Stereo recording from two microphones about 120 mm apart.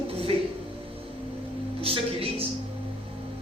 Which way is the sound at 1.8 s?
50° right (ahead or behind).